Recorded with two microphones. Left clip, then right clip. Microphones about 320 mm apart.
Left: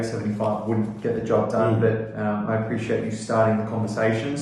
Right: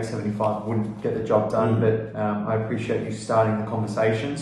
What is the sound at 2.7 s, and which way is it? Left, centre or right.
Speech, centre.